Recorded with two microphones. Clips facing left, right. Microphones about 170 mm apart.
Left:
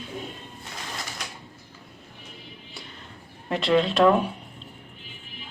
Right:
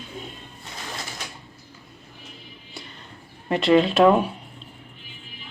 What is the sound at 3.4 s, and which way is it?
Speech, centre (ahead or behind).